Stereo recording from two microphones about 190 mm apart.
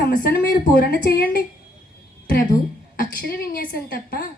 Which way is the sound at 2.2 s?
50° left (ahead or behind).